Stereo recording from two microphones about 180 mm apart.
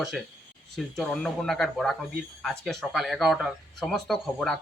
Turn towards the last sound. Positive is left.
turn(degrees=0)  # may be behind; listen again after turning